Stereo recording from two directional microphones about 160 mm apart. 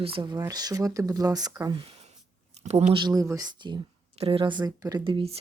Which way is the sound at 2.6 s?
40° right (ahead or behind).